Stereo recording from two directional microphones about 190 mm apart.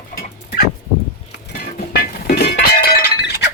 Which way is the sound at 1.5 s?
55° left (ahead or behind).